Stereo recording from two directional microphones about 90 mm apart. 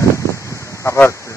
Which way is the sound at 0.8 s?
25° left (ahead or behind).